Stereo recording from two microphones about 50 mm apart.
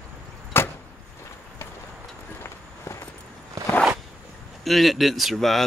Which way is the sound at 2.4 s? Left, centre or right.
Left.